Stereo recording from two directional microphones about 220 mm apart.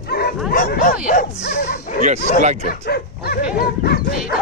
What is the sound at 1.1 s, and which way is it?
Bow-wow, 40° left (ahead or behind).